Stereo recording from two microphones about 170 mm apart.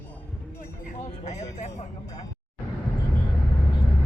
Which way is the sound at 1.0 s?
40° left (ahead or behind).